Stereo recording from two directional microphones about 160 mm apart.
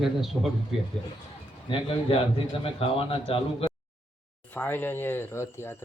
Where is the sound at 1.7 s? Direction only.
35° left (ahead or behind).